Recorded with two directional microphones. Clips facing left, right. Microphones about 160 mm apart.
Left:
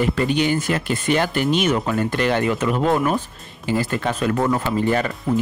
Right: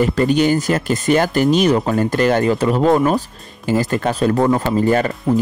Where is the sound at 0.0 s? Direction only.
40° right (ahead or behind).